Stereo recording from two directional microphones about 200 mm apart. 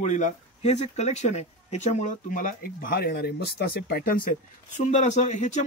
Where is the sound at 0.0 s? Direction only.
35° left (ahead or behind).